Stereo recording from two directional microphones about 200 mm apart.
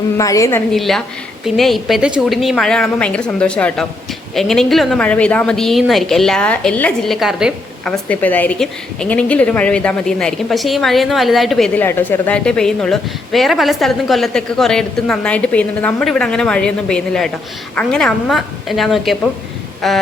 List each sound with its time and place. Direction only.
0.2 s a woman's voice: 15° left (ahead or behind)
0.7 s a woman's voice: centre (ahead or behind)